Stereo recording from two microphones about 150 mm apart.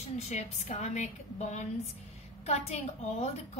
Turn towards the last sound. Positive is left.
turn(degrees=45)  # may be behind; listen again after turning